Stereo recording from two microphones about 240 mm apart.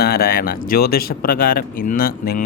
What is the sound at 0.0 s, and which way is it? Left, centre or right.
Speech, left.